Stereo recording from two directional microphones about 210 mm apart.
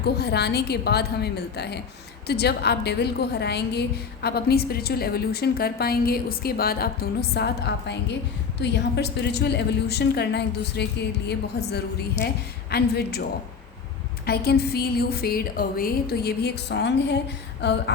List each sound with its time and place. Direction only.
0.0 s a woman's voice: 50° left (ahead or behind)
12.7 s a woman's voice: 50° left (ahead or behind)
14.3 s a woman's voice: 50° left (ahead or behind)